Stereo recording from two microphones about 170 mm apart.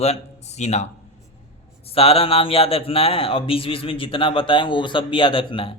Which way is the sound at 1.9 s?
35° left (ahead or behind).